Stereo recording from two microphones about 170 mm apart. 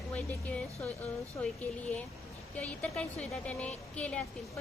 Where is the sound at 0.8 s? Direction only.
40° left (ahead or behind).